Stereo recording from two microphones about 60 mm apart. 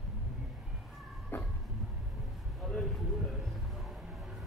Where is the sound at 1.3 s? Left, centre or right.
Left.